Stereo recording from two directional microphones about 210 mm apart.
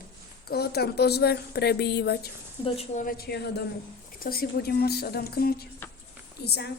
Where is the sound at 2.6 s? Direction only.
30° left (ahead or behind).